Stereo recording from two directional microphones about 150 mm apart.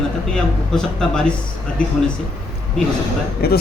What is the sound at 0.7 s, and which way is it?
Speech, 5° left (ahead or behind).